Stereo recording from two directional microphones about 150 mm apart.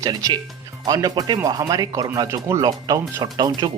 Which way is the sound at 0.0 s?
25° right (ahead or behind).